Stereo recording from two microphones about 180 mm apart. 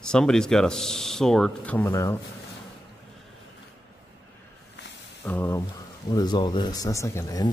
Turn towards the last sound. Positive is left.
turn(degrees=20)  # may be behind; listen again after turning